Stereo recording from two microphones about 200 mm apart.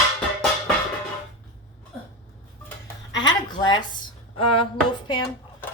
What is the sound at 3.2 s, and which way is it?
A woman's voice, 20° left (ahead or behind).